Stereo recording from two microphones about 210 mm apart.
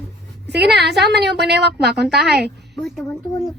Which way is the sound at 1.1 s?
50° right (ahead or behind).